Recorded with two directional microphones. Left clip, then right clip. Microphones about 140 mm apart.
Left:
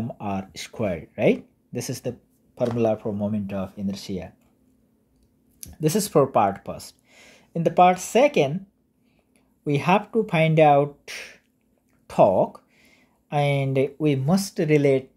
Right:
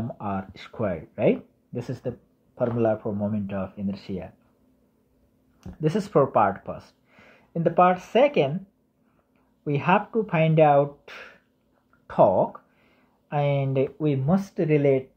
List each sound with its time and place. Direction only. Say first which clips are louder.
0.0 s speech: left 1 dB; 30° left (ahead or behind)
5.6 s speech: left 2 dB; 30° left (ahead or behind)
9.7 s speech: left 1 dB; 35° left (ahead or behind)